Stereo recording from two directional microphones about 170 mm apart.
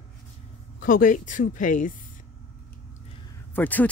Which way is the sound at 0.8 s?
50° left (ahead or behind).